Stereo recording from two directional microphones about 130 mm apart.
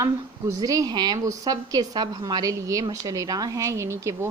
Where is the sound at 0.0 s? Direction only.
25° right (ahead or behind).